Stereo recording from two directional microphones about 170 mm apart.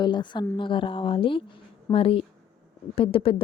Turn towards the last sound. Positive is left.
turn(degrees=35)  # may be behind; listen again after turning